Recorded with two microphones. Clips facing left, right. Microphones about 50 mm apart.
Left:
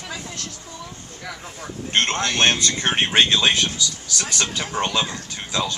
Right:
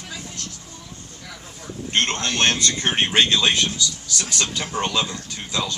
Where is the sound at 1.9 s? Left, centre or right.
Left.